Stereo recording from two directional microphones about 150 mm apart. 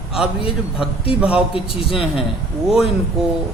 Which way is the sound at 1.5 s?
40° left (ahead or behind).